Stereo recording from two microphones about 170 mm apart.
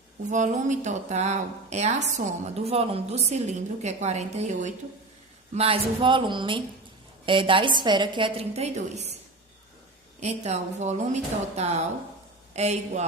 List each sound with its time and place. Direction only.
0.3 s a woman's voice: 45° right (ahead or behind)
10.2 s speech: 40° right (ahead or behind)